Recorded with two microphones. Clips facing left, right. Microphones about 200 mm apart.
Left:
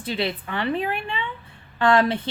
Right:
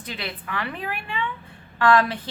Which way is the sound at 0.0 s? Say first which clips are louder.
Left 7 dB; 30° left (ahead or behind).